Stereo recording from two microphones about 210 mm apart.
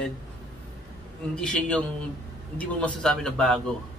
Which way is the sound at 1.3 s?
5° left (ahead or behind).